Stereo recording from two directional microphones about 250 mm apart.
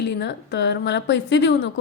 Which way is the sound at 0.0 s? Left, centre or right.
Left.